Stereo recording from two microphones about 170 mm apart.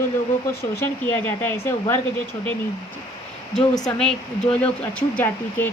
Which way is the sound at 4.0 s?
5° left (ahead or behind).